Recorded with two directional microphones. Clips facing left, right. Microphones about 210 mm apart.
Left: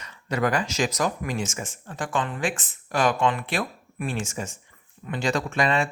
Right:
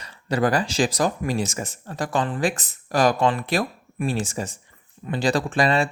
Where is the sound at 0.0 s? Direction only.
35° right (ahead or behind).